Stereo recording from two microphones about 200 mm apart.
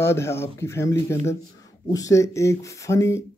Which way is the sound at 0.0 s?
10° left (ahead or behind).